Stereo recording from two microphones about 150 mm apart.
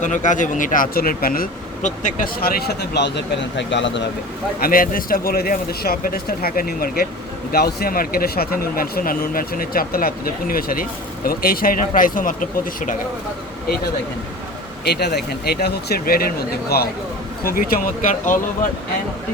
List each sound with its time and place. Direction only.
0.0 s speech: 55° left (ahead or behind)
2.4 s speech: 90° left
4.6 s speech: 70° left (ahead or behind)
7.5 s speech: 90° left; by 12.3 s 65° left (ahead or behind)
14.8 s speech: 90° left
17.4 s speech: 75° left (ahead or behind)